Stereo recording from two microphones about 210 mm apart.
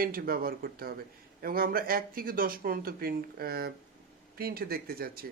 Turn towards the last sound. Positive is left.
turn(degrees=-45)  # may be behind; listen again after turning